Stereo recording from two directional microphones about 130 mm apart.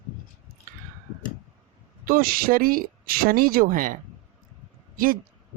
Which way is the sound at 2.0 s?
90° right.